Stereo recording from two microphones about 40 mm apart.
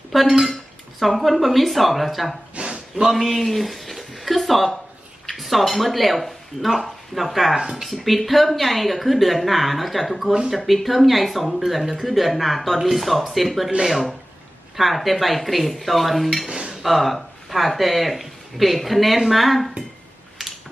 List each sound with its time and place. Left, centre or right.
0.1 s cutlery: centre
0.9 s speech: centre
2.6 s a sound: right
2.9 s speech: centre
16.6 s cutlery: centre
16.8 s speech: centre
20.4 s a sound: centre